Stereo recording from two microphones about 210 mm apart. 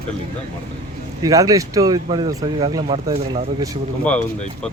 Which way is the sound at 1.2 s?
15° right (ahead or behind).